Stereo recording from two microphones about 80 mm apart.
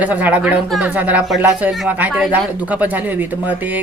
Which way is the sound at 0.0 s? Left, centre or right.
Centre.